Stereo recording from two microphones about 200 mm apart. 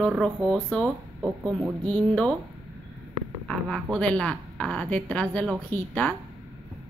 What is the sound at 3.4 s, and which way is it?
Speech, 5° left (ahead or behind).